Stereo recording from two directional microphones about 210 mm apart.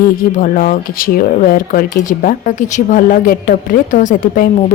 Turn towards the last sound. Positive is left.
turn(degrees=40)  # may be behind; listen again after turning